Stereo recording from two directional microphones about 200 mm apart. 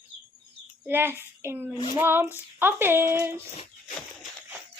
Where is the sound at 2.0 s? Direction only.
10° right (ahead or behind).